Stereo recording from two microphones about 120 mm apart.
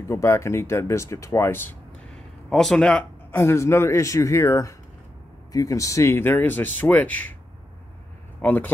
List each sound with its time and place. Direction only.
0.1 s speech: 25° left (ahead or behind)
2.5 s speech: 5° left (ahead or behind)
3.3 s speech: 20° left (ahead or behind)
8.4 s speech: 15° left (ahead or behind)